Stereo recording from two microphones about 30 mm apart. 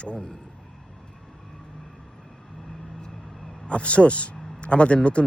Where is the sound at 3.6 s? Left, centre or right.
Left.